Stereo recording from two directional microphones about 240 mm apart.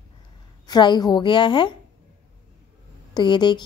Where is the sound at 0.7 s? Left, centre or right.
Centre.